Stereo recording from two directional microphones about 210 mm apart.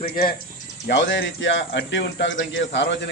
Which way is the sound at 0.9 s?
60° left (ahead or behind).